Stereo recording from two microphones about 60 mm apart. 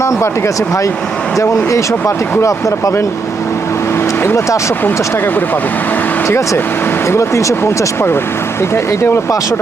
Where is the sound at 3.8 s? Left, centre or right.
Left.